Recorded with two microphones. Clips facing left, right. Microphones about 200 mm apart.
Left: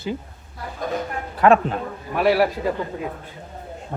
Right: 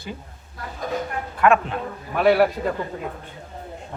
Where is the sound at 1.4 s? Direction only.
35° left (ahead or behind).